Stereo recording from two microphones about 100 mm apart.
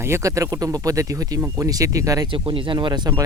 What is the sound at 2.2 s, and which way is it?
Speech, 55° right (ahead or behind).